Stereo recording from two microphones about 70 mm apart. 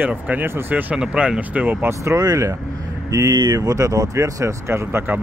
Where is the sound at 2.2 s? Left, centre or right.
Right.